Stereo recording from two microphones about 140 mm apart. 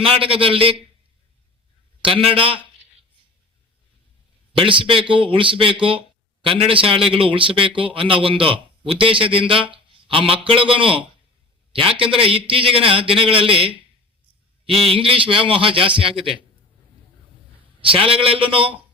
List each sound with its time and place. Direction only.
0.0 s a man's voice: 40° right (ahead or behind)
2.0 s a man's voice: 40° right (ahead or behind)
4.5 s a man's voice: 40° right (ahead or behind)
14.9 s a man's voice: 40° right (ahead or behind)
17.7 s a man's voice: 40° right (ahead or behind)